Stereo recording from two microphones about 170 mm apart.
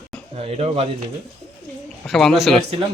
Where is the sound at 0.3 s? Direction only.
35° right (ahead or behind).